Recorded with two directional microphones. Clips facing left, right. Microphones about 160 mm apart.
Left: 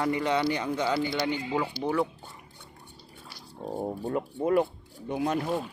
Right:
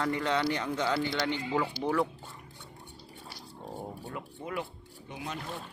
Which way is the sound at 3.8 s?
45° left (ahead or behind).